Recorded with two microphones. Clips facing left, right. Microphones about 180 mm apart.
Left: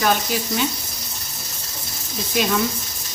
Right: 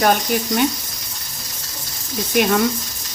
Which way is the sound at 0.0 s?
50° right (ahead or behind).